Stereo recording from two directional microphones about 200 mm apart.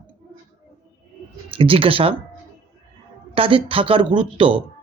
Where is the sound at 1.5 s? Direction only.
25° right (ahead or behind).